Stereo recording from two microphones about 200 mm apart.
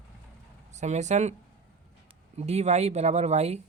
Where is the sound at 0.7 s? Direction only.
35° right (ahead or behind).